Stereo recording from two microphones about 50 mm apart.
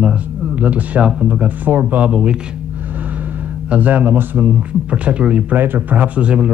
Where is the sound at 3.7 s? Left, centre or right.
Right.